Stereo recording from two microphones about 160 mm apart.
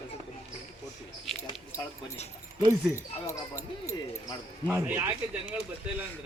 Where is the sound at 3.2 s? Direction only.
20° left (ahead or behind).